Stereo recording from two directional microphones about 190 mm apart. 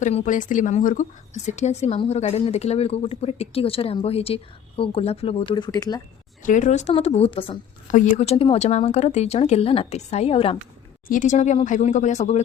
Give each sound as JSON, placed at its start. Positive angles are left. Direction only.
{"t": 0.0, "sound": "a woman's voice", "side_deg": 35}
{"t": 6.4, "sound": "a woman's voice", "side_deg": 40}
{"t": 7.9, "sound": "a woman's voice", "side_deg": 40}
{"t": 11.1, "sound": "a woman's voice", "side_deg": 40}